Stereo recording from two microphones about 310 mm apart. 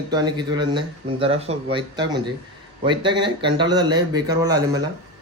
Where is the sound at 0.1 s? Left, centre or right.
Centre.